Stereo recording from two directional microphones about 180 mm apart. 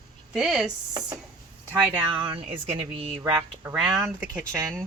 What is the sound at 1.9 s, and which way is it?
Speech, 25° right (ahead or behind).